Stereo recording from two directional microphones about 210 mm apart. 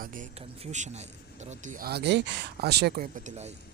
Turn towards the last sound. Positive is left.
turn(degrees=-35)  # may be behind; listen again after turning